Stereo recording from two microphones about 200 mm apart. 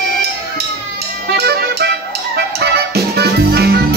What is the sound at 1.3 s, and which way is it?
Music, 55° right (ahead or behind).